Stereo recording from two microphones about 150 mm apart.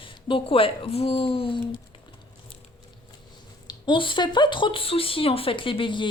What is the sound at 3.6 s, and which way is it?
Speech, 30° left (ahead or behind).